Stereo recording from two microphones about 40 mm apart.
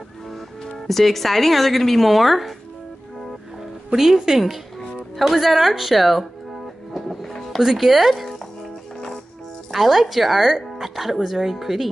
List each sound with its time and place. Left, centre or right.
0.7 s speech: centre
3.9 s speech: centre
6.9 s music: centre
7.5 s speech: centre
9.7 s speech: centre